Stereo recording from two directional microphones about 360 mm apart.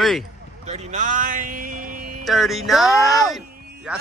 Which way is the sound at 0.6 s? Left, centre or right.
Centre.